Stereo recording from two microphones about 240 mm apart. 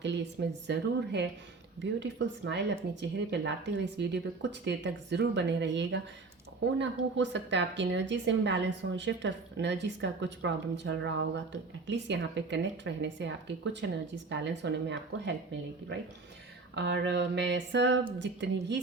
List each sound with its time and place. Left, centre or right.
0.0 s a woman's voice: right
16.7 s a woman's voice: right